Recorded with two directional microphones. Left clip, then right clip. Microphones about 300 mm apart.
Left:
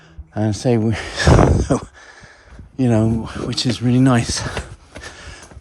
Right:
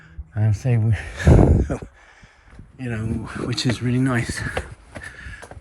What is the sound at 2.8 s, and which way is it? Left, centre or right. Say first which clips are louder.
Speech: left 11 dB; centre.